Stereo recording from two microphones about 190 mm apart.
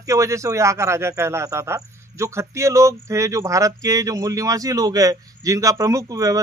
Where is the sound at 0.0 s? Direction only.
15° right (ahead or behind).